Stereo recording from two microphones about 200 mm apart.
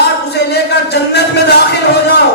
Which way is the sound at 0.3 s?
55° left (ahead or behind).